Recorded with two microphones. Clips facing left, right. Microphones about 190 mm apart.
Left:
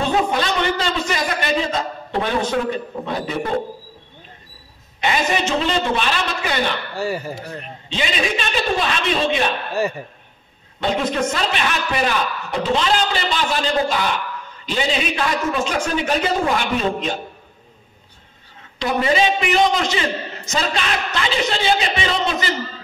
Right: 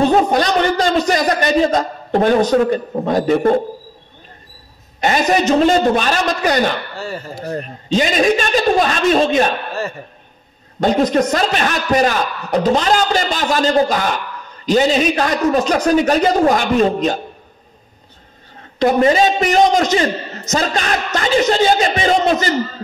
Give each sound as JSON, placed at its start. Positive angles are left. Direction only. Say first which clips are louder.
{"t": 0.0, "sound": "a man's voice", "louder": "right 6 dB", "side_deg": -40}
{"t": 5.0, "sound": "a man's voice", "louder": "right 6 dB", "side_deg": -45}
{"t": 7.0, "sound": "speech", "louder": "left 3 dB", "side_deg": 10}
{"t": 7.3, "sound": "a man's voice", "louder": "right 8 dB", "side_deg": -40}
{"t": 10.8, "sound": "a man's voice", "louder": "right 6 dB", "side_deg": -40}
{"t": 18.8, "sound": "a man's voice", "louder": "right 6 dB", "side_deg": -45}